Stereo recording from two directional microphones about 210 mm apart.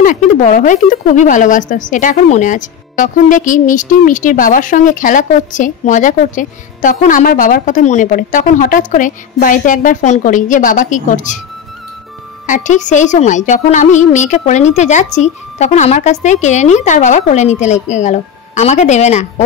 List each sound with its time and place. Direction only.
0.0 s speech: 35° left (ahead or behind)
12.4 s speech: 35° left (ahead or behind)